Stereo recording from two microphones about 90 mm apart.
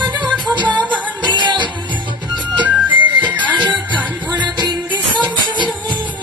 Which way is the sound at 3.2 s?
15° right (ahead or behind).